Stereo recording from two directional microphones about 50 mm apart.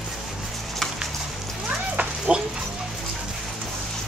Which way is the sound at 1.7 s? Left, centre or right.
Right.